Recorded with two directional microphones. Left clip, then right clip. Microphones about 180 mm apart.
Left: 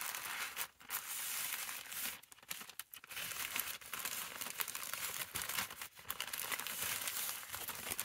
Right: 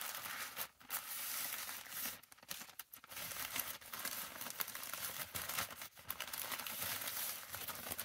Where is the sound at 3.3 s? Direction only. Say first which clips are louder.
Left 1 dB; 35° left (ahead or behind).